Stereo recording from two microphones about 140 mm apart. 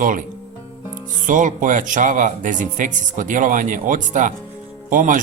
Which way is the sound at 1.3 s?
70° right (ahead or behind).